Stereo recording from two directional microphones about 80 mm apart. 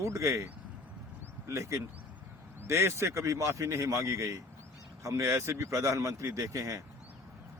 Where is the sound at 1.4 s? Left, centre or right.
Right.